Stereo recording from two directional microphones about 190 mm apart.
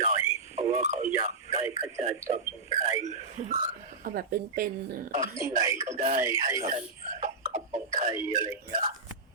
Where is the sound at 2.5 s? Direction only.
30° left (ahead or behind).